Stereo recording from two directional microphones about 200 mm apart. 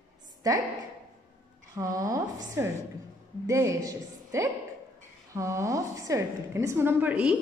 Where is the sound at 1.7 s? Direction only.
15° right (ahead or behind).